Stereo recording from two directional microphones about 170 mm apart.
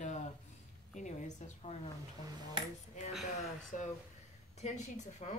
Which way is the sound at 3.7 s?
45° left (ahead or behind).